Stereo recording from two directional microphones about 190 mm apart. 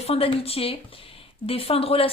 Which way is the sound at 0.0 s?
30° left (ahead or behind).